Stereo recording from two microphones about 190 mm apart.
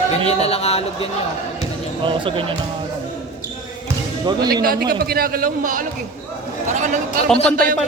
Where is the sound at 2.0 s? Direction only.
25° right (ahead or behind).